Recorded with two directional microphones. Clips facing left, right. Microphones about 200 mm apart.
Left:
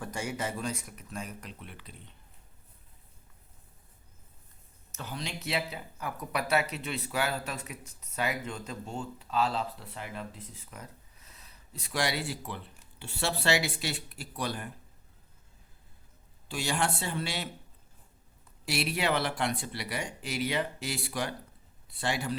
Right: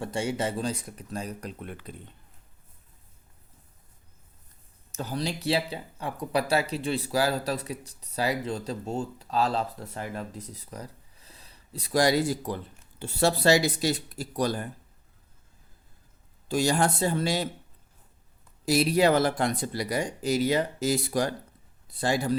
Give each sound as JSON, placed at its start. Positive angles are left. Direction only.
{"t": 0.0, "sound": "speech", "side_deg": -30}
{"t": 4.9, "sound": "speech", "side_deg": -40}
{"t": 16.5, "sound": "speech", "side_deg": -40}
{"t": 18.6, "sound": "speech", "side_deg": -40}